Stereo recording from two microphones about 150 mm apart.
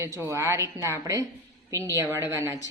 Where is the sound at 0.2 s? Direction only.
20° right (ahead or behind).